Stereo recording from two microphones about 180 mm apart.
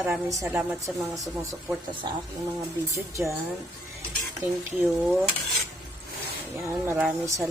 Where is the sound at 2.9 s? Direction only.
15° right (ahead or behind).